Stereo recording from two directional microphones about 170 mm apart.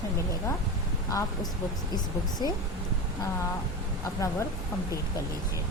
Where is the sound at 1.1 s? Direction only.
20° left (ahead or behind).